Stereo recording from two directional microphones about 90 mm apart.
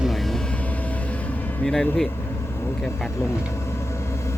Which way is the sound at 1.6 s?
5° left (ahead or behind).